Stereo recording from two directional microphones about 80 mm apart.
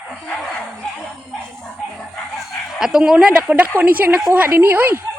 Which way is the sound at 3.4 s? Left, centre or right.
Centre.